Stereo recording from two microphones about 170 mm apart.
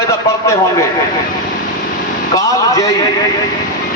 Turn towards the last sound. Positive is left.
turn(degrees=20)  # may be behind; listen again after turning